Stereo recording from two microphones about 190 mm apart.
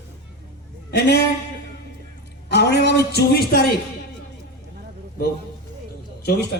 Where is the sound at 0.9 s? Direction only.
60° left (ahead or behind).